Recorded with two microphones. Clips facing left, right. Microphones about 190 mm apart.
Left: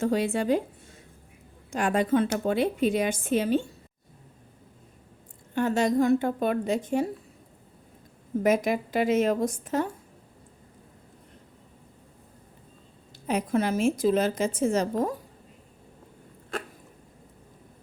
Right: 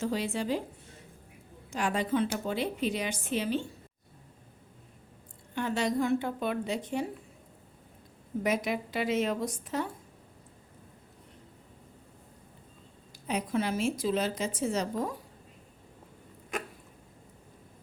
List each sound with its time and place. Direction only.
0.0 s a woman's voice: 50° left (ahead or behind)
1.7 s a woman's voice: 50° left (ahead or behind)
5.5 s a woman's voice: 45° left (ahead or behind)
8.4 s a woman's voice: 50° left (ahead or behind)
13.2 s a woman's voice: 50° left (ahead or behind)
16.5 s a sound: 15° right (ahead or behind)